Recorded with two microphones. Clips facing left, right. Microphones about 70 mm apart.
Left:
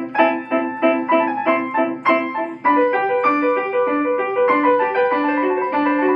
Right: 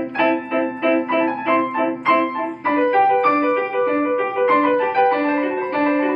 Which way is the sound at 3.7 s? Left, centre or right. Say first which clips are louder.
Left 1 dB; centre.